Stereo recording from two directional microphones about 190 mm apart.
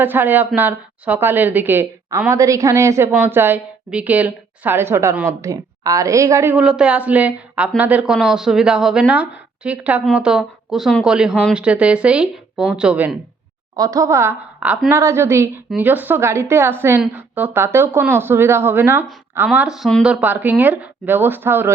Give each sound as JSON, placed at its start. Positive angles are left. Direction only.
{"t": 0.0, "sound": "a woman's voice", "side_deg": -10}
{"t": 13.7, "sound": "a woman's voice", "side_deg": -20}